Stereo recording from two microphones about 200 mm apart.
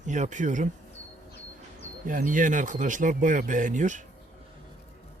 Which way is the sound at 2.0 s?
40° right (ahead or behind).